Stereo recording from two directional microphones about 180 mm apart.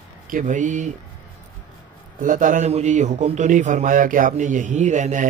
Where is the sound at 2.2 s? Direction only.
45° right (ahead or behind).